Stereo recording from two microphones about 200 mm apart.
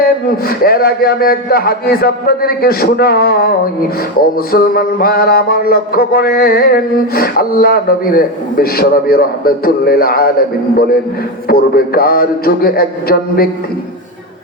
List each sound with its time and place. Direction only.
0.0 s mantra: 50° left (ahead or behind)
4.5 s mantra: 50° left (ahead or behind)